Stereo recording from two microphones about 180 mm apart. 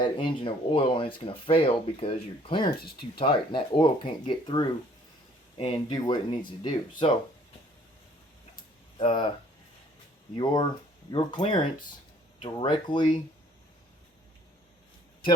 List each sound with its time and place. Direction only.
0.0 s speech: 25° left (ahead or behind)
9.0 s speech: 30° left (ahead or behind)
10.3 s speech: 25° left (ahead or behind)